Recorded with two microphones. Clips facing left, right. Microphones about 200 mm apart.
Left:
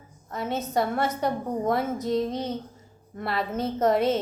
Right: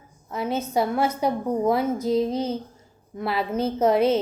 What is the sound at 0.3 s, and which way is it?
Speech, centre (ahead or behind).